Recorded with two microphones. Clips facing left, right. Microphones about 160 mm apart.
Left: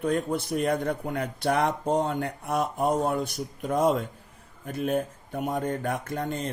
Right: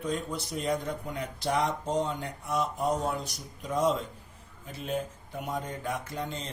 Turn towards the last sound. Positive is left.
turn(degrees=55)  # may be behind; listen again after turning